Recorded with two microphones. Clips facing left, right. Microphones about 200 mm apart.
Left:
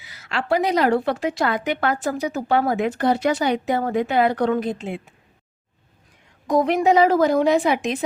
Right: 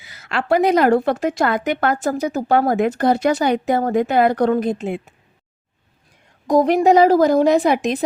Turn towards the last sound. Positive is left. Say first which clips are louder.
# right 3 dB
turn(degrees=-40)  # may be behind; listen again after turning